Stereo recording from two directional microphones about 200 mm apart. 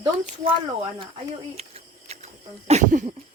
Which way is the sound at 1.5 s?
30° right (ahead or behind).